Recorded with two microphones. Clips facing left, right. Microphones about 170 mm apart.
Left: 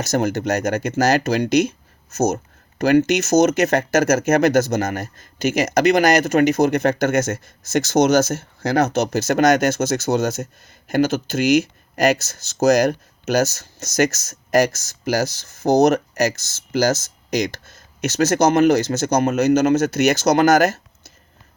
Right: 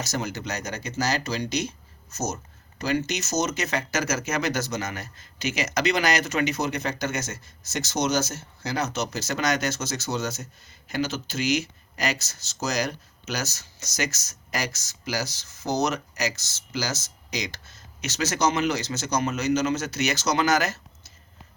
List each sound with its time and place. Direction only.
0.0 s speech: 50° left (ahead or behind)